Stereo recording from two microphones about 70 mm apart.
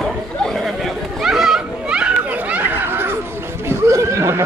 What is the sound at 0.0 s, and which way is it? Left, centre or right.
Chatter, centre.